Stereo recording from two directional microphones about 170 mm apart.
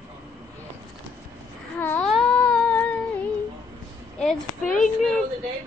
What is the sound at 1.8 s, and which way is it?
Wail, 10° left (ahead or behind).